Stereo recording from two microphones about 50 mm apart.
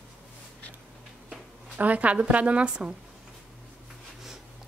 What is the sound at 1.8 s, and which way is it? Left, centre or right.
A woman's voice, right.